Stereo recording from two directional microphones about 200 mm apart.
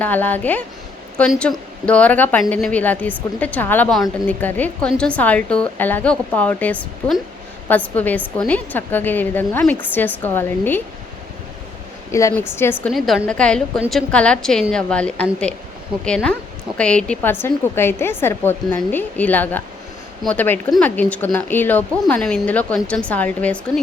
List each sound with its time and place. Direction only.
0.0 s a woman's voice: 10° left (ahead or behind)
12.1 s a woman's voice: 15° left (ahead or behind)
12.8 s a woman's voice: centre (ahead or behind)